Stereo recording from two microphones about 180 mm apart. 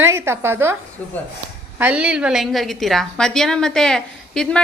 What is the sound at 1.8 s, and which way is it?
A woman's voice, 5° right (ahead or behind).